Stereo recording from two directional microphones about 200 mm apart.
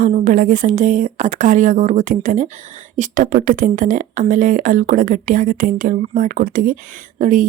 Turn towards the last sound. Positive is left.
turn(degrees=-40)  # may be behind; listen again after turning